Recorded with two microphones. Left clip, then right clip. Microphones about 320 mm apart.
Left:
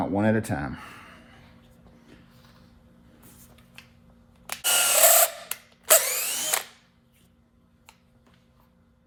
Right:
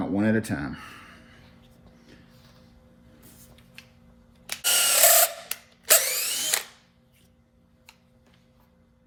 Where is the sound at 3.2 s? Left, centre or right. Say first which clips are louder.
Even; centre.